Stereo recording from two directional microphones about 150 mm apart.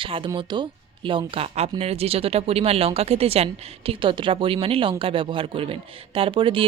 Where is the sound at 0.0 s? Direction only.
35° right (ahead or behind).